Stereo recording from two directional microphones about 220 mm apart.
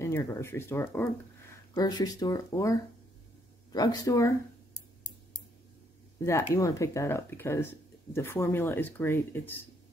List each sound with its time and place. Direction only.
0.0 s speech: 15° left (ahead or behind)
3.7 s speech: 15° left (ahead or behind)
6.1 s speech: 10° left (ahead or behind)